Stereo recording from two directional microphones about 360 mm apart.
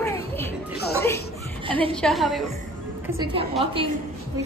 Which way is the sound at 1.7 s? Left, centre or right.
Centre.